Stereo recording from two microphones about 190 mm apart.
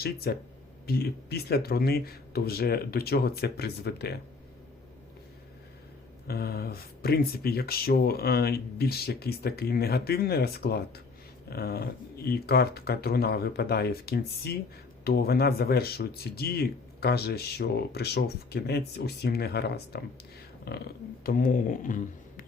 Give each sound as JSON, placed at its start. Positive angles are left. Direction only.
{"t": 0.0, "sound": "speech", "side_deg": 55}
{"t": 6.2, "sound": "speech", "side_deg": 55}